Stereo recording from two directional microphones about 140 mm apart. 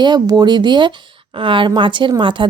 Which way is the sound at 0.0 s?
30° right (ahead or behind).